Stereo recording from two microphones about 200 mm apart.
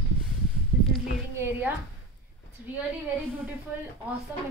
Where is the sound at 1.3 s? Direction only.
10° right (ahead or behind).